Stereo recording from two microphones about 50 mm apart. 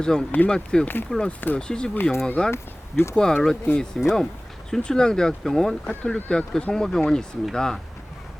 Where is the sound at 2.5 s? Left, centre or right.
Left.